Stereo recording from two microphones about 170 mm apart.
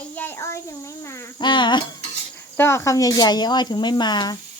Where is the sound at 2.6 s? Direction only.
15° left (ahead or behind).